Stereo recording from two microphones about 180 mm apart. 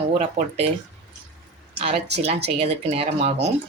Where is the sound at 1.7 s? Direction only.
35° right (ahead or behind).